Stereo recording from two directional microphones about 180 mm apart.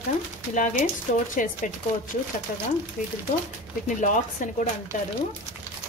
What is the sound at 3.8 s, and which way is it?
Speech, 45° left (ahead or behind).